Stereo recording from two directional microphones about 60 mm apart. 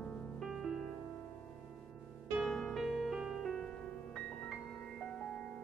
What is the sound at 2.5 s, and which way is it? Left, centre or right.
Music, centre.